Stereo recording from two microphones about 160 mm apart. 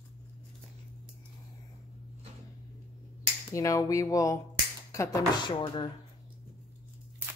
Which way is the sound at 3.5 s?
20° left (ahead or behind).